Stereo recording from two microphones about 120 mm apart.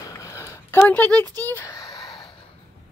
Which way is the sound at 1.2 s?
30° right (ahead or behind).